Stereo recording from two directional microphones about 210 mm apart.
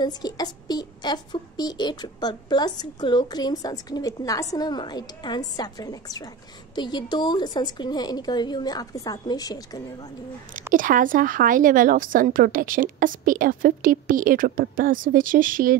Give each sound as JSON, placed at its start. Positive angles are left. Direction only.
{"t": 0.0, "sound": "speech", "side_deg": 20}
{"t": 10.7, "sound": "a woman's voice", "side_deg": -40}